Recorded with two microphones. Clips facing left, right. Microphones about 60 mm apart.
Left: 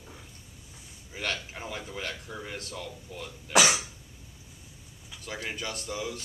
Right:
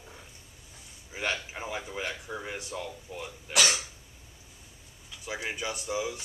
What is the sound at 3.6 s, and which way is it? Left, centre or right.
Cough, centre.